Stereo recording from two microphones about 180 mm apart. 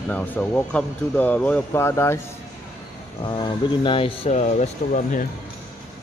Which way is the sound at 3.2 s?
25° left (ahead or behind).